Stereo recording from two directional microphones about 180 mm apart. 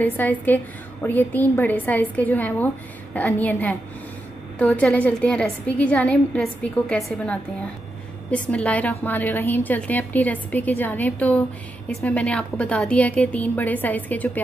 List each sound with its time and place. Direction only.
0.0 s a woman's voice: 10° left (ahead or behind)